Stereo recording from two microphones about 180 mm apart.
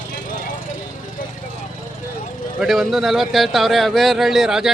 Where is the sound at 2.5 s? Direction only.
Centre (ahead or behind).